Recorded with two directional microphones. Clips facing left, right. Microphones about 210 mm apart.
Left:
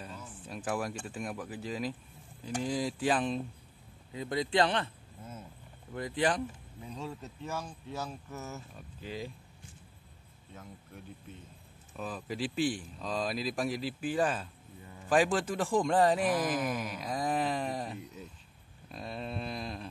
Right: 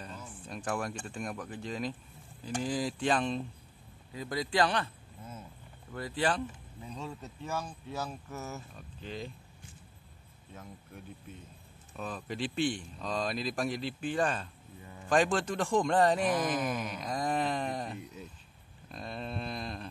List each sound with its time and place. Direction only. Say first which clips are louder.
0.0 s speech: even; 5° left (ahead or behind)
4.1 s speech: left 2 dB; 25° left (ahead or behind)
5.9 s speech: left 1 dB; 20° left (ahead or behind)
9.0 s speech: left 1 dB; 10° left (ahead or behind)
12.0 s speech: even; 5° left (ahead or behind)
18.9 s a sound: even; 5° left (ahead or behind)